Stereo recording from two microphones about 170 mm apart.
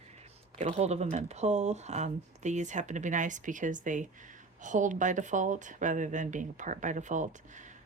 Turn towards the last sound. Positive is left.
turn(degrees=-45)  # may be behind; listen again after turning